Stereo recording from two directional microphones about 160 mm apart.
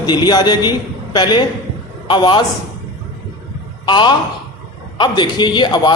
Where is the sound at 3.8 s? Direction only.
30° left (ahead or behind).